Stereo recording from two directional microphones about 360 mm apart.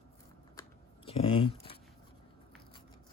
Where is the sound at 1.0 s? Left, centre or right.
Centre.